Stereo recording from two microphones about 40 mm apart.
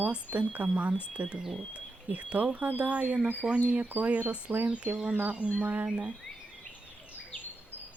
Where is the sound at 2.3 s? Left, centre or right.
Right.